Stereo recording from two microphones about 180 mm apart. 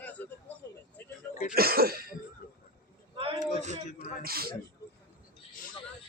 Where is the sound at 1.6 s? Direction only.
55° right (ahead or behind).